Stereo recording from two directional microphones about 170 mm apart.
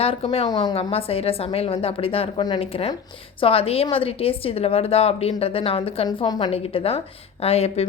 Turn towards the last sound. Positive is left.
turn(degrees=40)  # may be behind; listen again after turning